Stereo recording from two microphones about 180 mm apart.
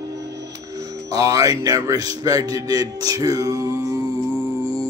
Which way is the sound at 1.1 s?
20° right (ahead or behind).